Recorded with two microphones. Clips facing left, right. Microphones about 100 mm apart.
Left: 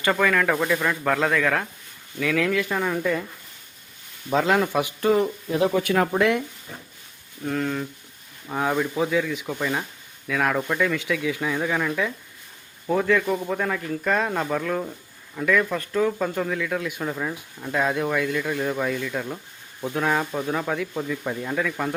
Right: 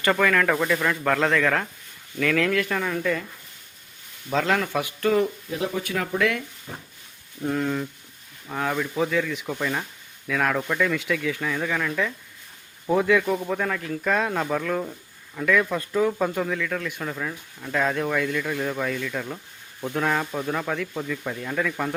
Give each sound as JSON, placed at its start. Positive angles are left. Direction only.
{"t": 0.1, "sound": "speech", "side_deg": 5}
{"t": 4.3, "sound": "speech", "side_deg": 15}
{"t": 6.7, "sound": "a sound", "side_deg": -40}
{"t": 7.4, "sound": "speech", "side_deg": -5}
{"t": 8.4, "sound": "speech", "side_deg": 15}
{"t": 12.9, "sound": "speech", "side_deg": -5}